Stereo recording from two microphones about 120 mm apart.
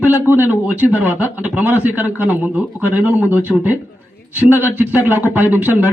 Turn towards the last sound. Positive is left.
turn(degrees=-15)  # may be behind; listen again after turning